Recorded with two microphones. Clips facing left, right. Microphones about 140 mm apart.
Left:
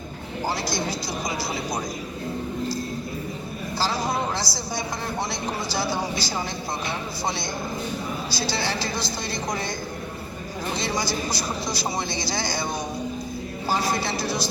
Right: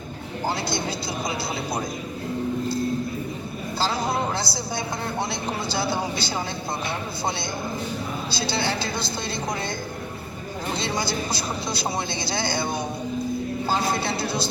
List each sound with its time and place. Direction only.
3.8 s a sound: 25° right (ahead or behind)
5.6 s speech: 25° right (ahead or behind)
8.4 s speech: 25° right (ahead or behind)
10.8 s speech: 25° right (ahead or behind)